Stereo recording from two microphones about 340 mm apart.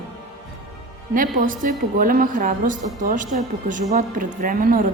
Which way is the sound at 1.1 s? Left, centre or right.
Right.